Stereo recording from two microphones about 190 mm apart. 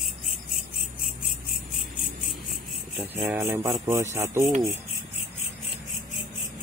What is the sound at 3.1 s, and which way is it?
Speech, 5° right (ahead or behind).